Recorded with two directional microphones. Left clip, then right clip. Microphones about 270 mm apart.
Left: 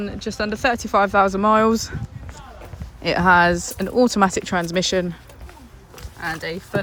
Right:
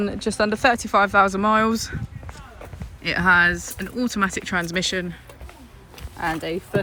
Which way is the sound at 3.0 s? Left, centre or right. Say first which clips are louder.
Left 2 dB; centre.